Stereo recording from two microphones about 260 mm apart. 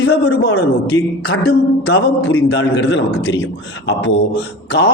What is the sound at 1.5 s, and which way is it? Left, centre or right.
A man's voice, left.